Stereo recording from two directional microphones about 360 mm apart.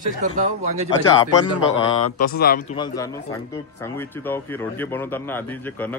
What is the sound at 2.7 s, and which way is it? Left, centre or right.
Speech, centre.